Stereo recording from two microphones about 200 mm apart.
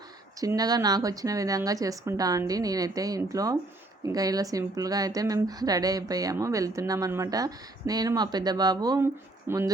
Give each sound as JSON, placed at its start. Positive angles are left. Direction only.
{"t": 0.3, "sound": "a woman's voice", "side_deg": -20}